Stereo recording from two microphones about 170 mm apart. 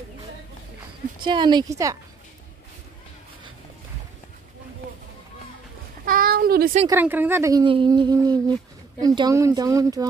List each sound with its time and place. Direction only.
1.2 s speech: 25° right (ahead or behind)
6.0 s a sound: 60° right (ahead or behind)
6.9 s speech: 10° right (ahead or behind)
7.6 s speech: 30° right (ahead or behind)